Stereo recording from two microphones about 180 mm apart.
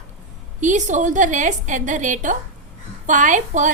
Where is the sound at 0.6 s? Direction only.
45° right (ahead or behind).